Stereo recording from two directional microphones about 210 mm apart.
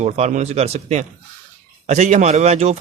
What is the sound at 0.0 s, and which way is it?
Speech, 35° right (ahead or behind).